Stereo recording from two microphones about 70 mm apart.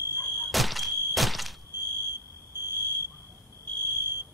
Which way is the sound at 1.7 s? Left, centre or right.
Right.